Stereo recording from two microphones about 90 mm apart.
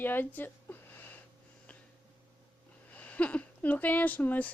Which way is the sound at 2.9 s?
15° left (ahead or behind).